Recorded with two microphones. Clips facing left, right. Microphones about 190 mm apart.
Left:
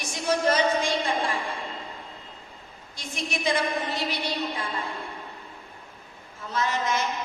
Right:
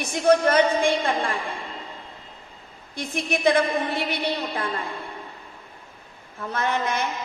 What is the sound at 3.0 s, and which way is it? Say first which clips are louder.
A woman's voice: right 6 dB; 55° right (ahead or behind).